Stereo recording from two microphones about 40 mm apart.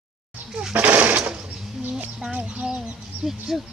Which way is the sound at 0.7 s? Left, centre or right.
Right.